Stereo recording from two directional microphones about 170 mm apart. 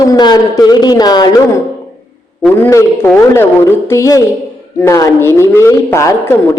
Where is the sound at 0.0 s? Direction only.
20° left (ahead or behind).